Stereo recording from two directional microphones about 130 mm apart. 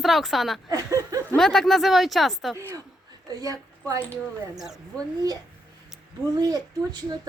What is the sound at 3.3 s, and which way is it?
Speech, 30° right (ahead or behind).